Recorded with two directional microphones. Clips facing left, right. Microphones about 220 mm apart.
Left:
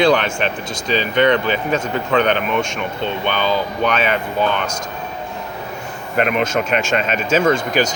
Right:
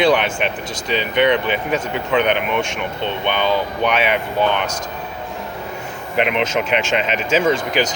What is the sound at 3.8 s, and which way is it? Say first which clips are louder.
Speech: even; 15° right (ahead or behind).